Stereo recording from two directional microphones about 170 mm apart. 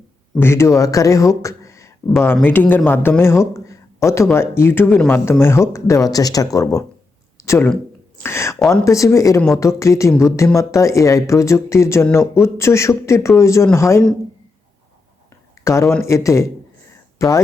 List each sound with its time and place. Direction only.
0.3 s speech: 15° left (ahead or behind)
7.3 s a sound: 15° left (ahead or behind)
8.2 s speech: 15° left (ahead or behind)
15.6 s speech: 15° left (ahead or behind)